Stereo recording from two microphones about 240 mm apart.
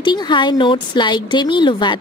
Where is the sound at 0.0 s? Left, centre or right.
Centre.